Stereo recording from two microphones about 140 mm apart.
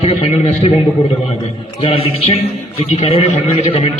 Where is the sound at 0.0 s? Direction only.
45° left (ahead or behind).